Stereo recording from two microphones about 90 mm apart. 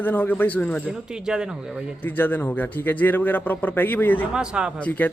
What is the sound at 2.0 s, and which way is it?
A man's voice, 20° left (ahead or behind).